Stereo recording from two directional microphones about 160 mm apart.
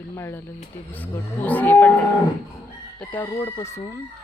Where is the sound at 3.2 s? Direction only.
20° left (ahead or behind).